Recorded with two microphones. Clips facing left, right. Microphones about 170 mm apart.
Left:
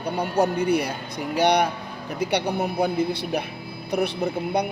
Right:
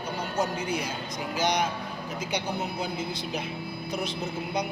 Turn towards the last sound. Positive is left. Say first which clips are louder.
# left 6 dB
turn(degrees=60)  # may be behind; listen again after turning